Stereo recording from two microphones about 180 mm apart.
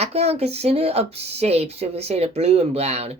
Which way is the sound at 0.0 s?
35° right (ahead or behind).